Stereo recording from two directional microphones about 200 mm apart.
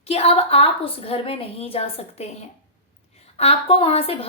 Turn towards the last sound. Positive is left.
turn(degrees=30)  # may be behind; listen again after turning